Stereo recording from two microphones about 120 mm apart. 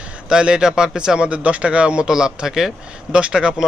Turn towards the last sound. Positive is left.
turn(degrees=-10)  # may be behind; listen again after turning